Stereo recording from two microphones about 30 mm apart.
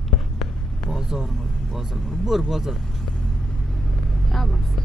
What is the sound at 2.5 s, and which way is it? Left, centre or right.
Speech, centre.